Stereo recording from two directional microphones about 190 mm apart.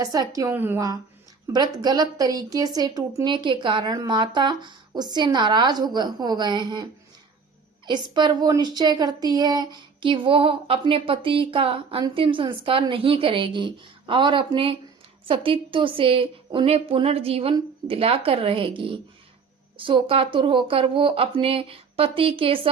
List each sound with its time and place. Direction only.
0.0 s a woman's voice: 20° right (ahead or behind)
7.9 s a woman's voice: 25° right (ahead or behind)